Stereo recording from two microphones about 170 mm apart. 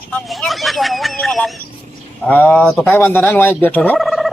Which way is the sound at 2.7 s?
10° left (ahead or behind).